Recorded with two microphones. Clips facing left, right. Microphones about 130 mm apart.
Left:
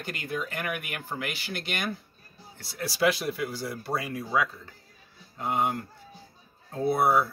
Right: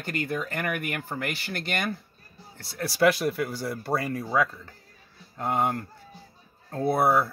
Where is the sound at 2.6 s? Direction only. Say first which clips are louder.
Right 4 dB; 55° right (ahead or behind).